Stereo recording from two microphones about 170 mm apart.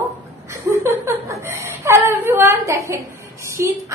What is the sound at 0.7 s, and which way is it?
A woman's voice, 15° right (ahead or behind).